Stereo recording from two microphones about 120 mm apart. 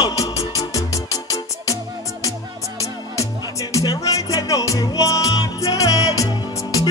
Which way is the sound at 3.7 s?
30° left (ahead or behind).